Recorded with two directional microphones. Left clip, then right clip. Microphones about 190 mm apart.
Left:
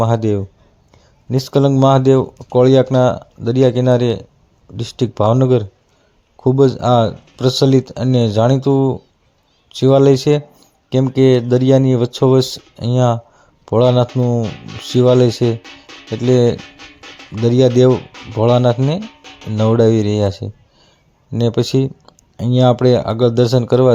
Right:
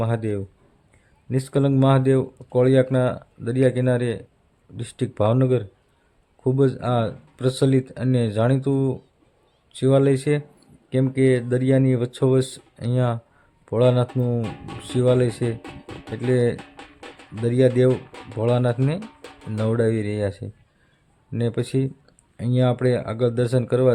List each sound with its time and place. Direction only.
0.0 s speech: 20° left (ahead or behind)
15.6 s speech: 50° right (ahead or behind)
16.1 s speech: 25° left (ahead or behind)